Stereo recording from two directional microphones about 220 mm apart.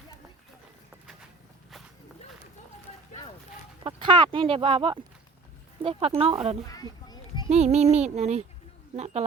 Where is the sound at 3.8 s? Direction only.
20° right (ahead or behind).